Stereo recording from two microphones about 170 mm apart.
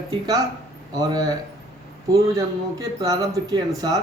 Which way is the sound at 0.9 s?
20° right (ahead or behind).